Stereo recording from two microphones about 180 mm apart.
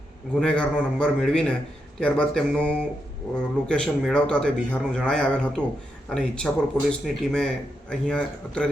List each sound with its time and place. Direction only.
0.3 s speech: 5° left (ahead or behind)